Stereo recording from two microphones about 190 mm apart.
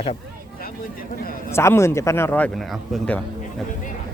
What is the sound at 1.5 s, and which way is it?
Speech, 15° left (ahead or behind).